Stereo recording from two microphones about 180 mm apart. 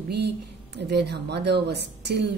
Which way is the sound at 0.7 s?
70° right (ahead or behind).